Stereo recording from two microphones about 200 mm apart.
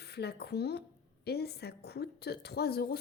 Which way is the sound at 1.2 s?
55° left (ahead or behind).